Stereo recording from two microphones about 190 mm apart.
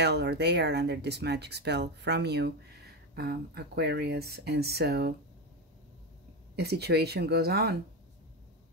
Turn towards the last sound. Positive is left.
turn(degrees=-55)  # may be behind; listen again after turning